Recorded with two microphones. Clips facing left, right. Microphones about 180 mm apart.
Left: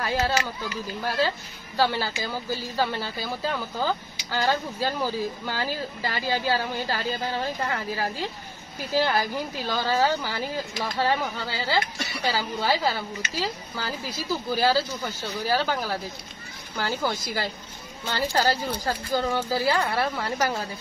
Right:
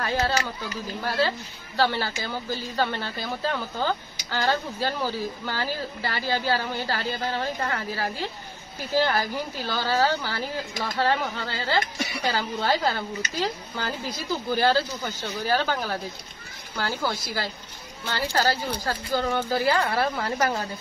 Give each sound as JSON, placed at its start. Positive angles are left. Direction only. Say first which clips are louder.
{"t": 0.0, "sound": "speech", "louder": "even", "side_deg": 10}
{"t": 1.8, "sound": "a woman's voice", "louder": "even", "side_deg": 10}
{"t": 19.9, "sound": "a woman's voice", "louder": "right 1 dB", "side_deg": 0}